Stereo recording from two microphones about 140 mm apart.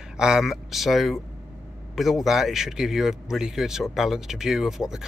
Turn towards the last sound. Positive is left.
turn(degrees=-5)  # may be behind; listen again after turning